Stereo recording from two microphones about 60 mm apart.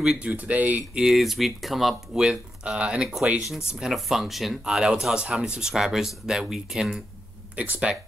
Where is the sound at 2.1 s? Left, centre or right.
Centre.